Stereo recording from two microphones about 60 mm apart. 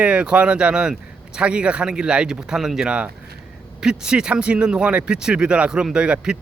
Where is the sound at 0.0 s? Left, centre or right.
Centre.